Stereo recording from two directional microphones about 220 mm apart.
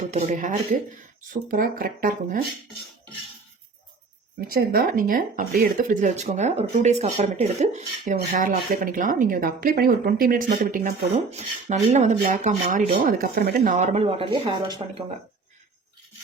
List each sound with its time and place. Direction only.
0.1 s speech: 35° right (ahead or behind)
4.4 s speech: 40° right (ahead or behind)
13.7 s speech: 30° right (ahead or behind)